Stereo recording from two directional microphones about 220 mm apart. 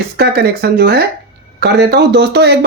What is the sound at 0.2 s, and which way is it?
Speech, 45° right (ahead or behind).